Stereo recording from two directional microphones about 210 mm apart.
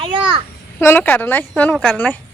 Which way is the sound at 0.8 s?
10° left (ahead or behind).